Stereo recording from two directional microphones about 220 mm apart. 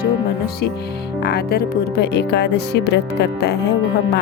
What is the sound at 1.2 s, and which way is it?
Speech, 45° left (ahead or behind).